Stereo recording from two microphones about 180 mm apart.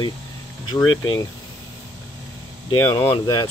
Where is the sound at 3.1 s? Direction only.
25° left (ahead or behind).